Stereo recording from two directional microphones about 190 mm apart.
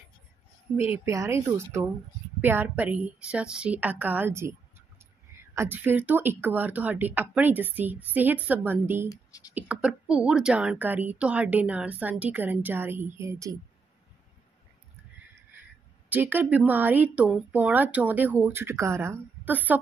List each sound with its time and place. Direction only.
0.7 s speech: 30° left (ahead or behind)
1.0 s a woman's voice: 15° right (ahead or behind)
16.1 s a woman's voice: 10° right (ahead or behind)